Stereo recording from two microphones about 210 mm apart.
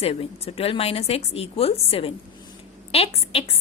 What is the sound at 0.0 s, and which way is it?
Speech, 30° left (ahead or behind).